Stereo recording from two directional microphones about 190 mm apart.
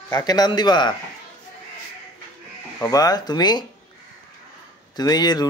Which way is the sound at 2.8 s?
20° left (ahead or behind).